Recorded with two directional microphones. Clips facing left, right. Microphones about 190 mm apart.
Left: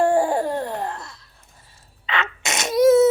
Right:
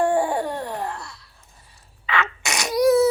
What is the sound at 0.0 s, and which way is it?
Laughter, 25° left (ahead or behind).